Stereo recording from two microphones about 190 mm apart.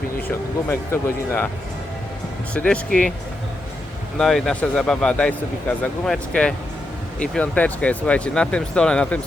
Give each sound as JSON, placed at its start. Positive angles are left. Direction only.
{"t": 0.3, "sound": "speech", "side_deg": 10}
{"t": 2.5, "sound": "speech", "side_deg": 5}
{"t": 4.2, "sound": "speech", "side_deg": 0}